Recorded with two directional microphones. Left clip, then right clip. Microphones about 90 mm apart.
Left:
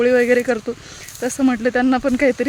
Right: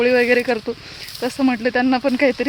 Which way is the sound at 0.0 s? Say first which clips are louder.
Left 1 dB; 30° left (ahead or behind).